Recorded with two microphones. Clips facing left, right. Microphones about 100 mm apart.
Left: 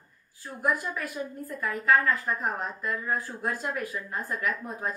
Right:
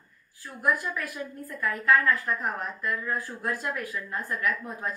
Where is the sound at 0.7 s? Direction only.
20° left (ahead or behind).